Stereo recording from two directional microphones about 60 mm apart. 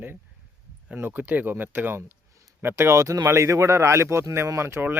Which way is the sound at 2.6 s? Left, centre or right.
Right.